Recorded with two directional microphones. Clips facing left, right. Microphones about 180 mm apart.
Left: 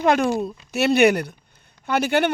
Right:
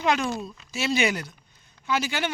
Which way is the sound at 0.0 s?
50° left (ahead or behind).